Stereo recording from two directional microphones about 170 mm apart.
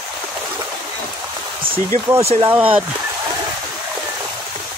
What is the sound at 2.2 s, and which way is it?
Speech, 35° right (ahead or behind).